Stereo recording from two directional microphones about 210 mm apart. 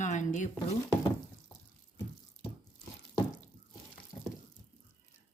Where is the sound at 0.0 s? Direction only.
35° left (ahead or behind).